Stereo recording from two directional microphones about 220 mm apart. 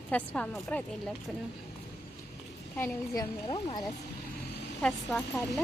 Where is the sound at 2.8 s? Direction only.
15° left (ahead or behind).